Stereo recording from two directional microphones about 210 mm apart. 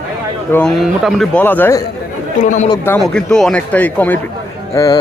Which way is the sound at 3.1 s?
5° left (ahead or behind).